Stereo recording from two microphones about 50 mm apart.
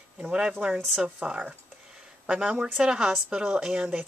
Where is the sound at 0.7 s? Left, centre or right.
Centre.